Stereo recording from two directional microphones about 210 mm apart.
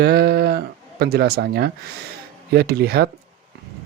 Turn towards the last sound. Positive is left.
turn(degrees=-50)  # may be behind; listen again after turning